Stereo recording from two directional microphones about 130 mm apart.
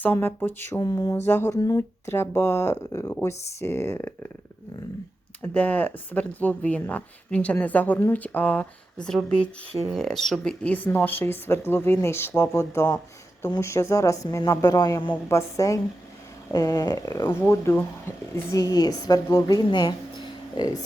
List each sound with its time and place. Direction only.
0.0 s speech: 15° left (ahead or behind)
0.8 s speech: 30° left (ahead or behind)
1.1 s speech: 15° left (ahead or behind)
1.5 s speech: 30° left (ahead or behind)
5.4 s speech: 15° left (ahead or behind); by 17.2 s 30° left (ahead or behind)
17.2 s speech: 20° left (ahead or behind); by 20.8 s 35° left (ahead or behind)